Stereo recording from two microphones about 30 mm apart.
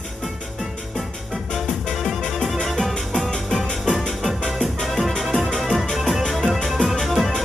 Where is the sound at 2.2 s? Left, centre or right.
Centre.